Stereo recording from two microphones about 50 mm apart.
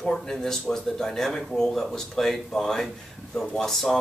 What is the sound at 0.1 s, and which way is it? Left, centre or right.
Speech, centre.